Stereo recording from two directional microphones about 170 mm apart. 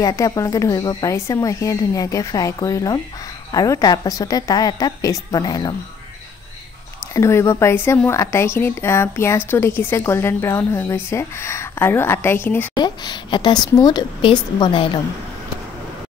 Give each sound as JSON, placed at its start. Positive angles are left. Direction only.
{"t": 0.0, "sound": "a woman's voice", "side_deg": 20}
{"t": 7.2, "sound": "a woman's voice", "side_deg": 15}
{"t": 12.7, "sound": "a woman's voice", "side_deg": 25}